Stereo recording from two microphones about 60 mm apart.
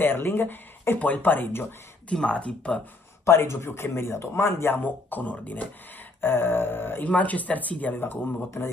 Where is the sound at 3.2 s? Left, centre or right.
Left.